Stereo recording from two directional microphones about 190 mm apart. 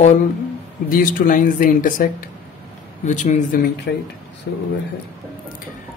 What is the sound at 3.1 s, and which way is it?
Mantra, 40° left (ahead or behind).